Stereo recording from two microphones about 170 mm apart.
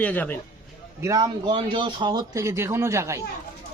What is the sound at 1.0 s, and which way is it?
A man's voice, 20° right (ahead or behind).